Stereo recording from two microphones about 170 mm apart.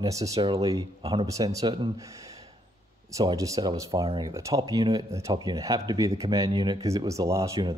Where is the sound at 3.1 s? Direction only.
20° right (ahead or behind).